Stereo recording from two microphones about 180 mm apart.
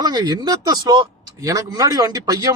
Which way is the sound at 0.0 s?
20° right (ahead or behind).